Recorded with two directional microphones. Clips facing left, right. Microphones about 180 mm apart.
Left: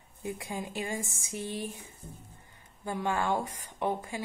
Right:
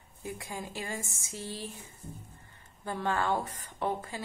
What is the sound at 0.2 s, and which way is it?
A woman's voice, 20° left (ahead or behind).